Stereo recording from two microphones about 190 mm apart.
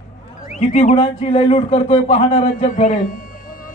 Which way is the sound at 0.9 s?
30° left (ahead or behind).